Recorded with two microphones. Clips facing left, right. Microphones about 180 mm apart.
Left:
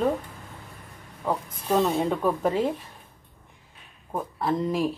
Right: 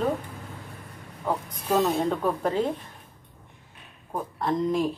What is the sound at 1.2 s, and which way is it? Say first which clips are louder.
Speech: even; centre (ahead or behind).